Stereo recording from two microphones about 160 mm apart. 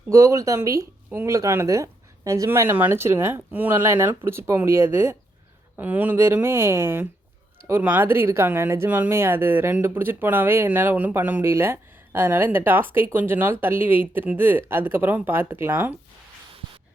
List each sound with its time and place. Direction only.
0.1 s speech: 20° right (ahead or behind)